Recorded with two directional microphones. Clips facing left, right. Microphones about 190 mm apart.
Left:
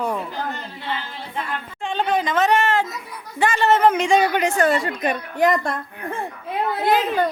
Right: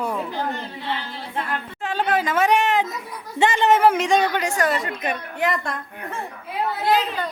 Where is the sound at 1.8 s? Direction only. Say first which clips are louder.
Left 1 dB; 5° right (ahead or behind).